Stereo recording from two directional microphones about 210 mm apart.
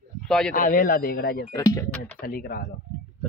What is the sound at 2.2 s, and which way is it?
Speech, 45° left (ahead or behind).